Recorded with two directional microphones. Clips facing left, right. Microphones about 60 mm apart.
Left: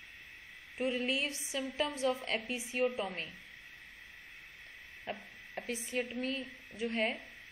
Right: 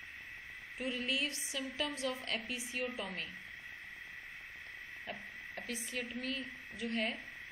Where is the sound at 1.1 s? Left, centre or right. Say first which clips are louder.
Left 2 dB; centre.